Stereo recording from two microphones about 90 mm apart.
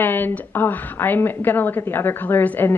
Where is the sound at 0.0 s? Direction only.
20° left (ahead or behind).